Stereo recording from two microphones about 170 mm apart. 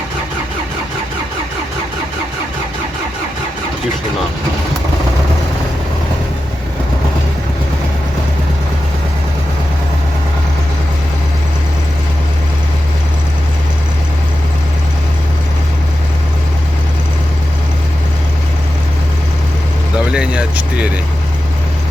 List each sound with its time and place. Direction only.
20.1 s vehicle: 5° right (ahead or behind)